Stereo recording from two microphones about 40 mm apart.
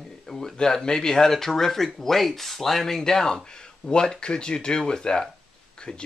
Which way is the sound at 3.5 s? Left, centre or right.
Left.